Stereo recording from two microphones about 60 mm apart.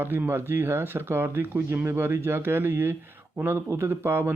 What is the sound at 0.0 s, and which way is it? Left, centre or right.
Speech, right.